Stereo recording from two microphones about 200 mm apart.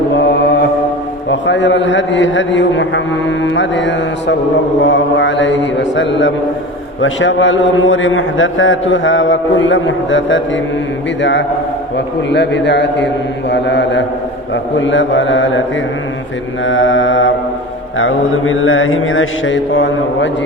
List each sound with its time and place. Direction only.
0.1 s mantra: 60° left (ahead or behind)
1.3 s a man's voice: 65° left (ahead or behind)
4.8 s mantra: 65° left (ahead or behind)
7.0 s a man's voice: 70° left (ahead or behind)
11.2 s mantra: 65° left (ahead or behind)
14.5 s a man's voice: 70° left (ahead or behind)
16.6 s a man's voice: 70° left (ahead or behind)
17.9 s mantra: 90° left; by 20.3 s 65° left (ahead or behind)